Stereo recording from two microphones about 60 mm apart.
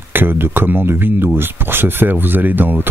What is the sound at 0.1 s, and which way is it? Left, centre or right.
Speech, right.